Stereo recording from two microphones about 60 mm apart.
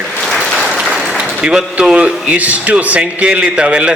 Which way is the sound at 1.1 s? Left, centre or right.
Centre.